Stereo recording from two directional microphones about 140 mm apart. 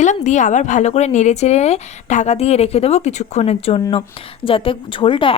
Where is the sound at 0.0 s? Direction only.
60° left (ahead or behind).